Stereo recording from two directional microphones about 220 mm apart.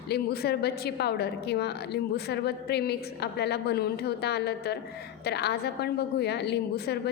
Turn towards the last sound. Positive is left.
turn(degrees=50)  # may be behind; listen again after turning